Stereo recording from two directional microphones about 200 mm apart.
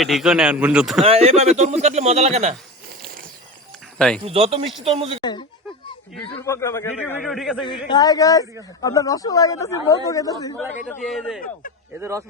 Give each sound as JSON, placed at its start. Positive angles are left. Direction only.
{"t": 0.0, "sound": "a man's voice", "side_deg": 0}
{"t": 1.0, "sound": "a man's voice", "side_deg": -30}
{"t": 3.9, "sound": "speech", "side_deg": 5}
{"t": 4.2, "sound": "speech", "side_deg": -30}
{"t": 5.2, "sound": "a child's voice", "side_deg": 20}
{"t": 7.6, "sound": "speech", "side_deg": 20}
{"t": 10.8, "sound": "a man's voice", "side_deg": 0}
{"t": 11.9, "sound": "speech", "side_deg": -15}